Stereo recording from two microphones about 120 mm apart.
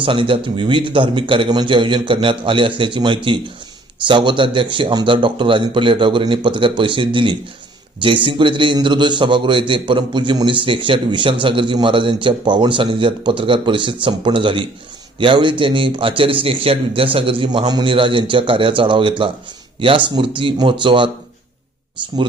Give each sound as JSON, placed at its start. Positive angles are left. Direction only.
{"t": 0.0, "sound": "a man's voice", "side_deg": -45}